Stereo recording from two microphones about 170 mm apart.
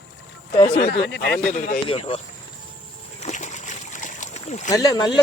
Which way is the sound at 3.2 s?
45° left (ahead or behind).